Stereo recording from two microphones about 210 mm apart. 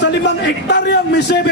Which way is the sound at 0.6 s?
55° left (ahead or behind).